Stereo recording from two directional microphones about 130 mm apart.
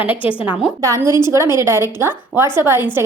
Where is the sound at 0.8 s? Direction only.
25° right (ahead or behind).